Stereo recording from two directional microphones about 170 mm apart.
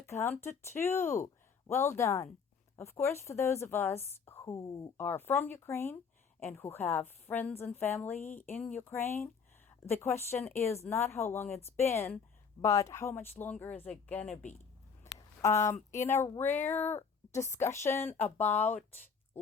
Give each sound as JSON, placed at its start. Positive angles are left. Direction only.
{"t": 0.0, "sound": "a woman's voice", "side_deg": 15}
{"t": 8.3, "sound": "speech", "side_deg": 50}
{"t": 8.6, "sound": "a woman's voice", "side_deg": 10}
{"t": 15.4, "sound": "a woman's voice", "side_deg": 15}